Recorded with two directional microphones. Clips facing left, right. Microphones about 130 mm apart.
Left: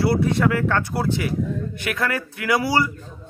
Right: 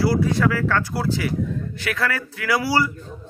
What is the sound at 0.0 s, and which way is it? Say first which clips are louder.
Speech: even; 25° left (ahead or behind).